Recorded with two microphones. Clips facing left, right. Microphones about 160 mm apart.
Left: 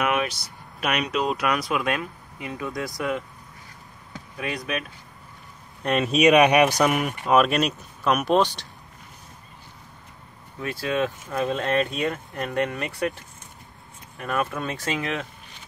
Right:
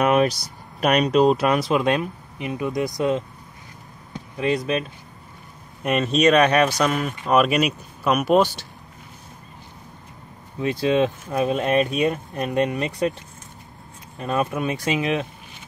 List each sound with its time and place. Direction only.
0.0 s speech: 35° right (ahead or behind)
4.1 s basketball bounce: 25° right (ahead or behind)
5.8 s speech: 5° right (ahead or behind)
6.1 s speech: 10° left (ahead or behind)
7.2 s speech: centre (ahead or behind)
10.6 s speech: 20° right (ahead or behind)
14.1 s speech: 20° right (ahead or behind)